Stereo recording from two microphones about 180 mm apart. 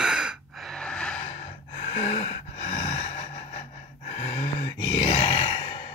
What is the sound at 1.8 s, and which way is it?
Snort, 35° left (ahead or behind).